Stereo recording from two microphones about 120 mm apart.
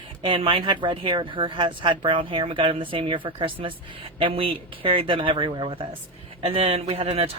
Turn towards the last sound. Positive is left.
turn(degrees=-50)  # may be behind; listen again after turning